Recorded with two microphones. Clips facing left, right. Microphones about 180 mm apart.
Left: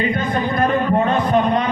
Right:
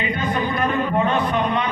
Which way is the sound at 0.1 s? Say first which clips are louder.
Left 2 dB; 40° left (ahead or behind).